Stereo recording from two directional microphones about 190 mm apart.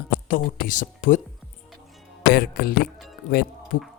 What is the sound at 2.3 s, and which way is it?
Speech, 55° left (ahead or behind).